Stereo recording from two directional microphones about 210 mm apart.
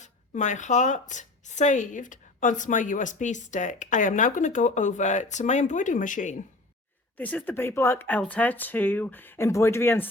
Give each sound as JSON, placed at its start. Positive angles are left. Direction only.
{"t": 0.0, "sound": "speech", "side_deg": 35}
{"t": 7.2, "sound": "speech", "side_deg": 5}